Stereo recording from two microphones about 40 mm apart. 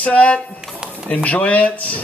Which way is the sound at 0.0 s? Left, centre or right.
Left.